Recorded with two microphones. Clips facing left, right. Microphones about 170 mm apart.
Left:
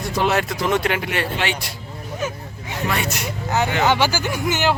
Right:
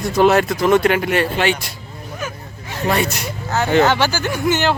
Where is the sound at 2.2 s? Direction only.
25° left (ahead or behind).